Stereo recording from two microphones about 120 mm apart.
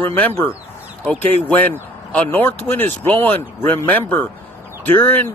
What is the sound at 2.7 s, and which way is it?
Speech, 15° left (ahead or behind).